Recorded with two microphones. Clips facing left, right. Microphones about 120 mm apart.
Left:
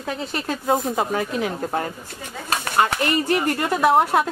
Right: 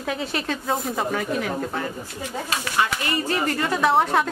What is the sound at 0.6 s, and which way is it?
Speech, 25° left (ahead or behind).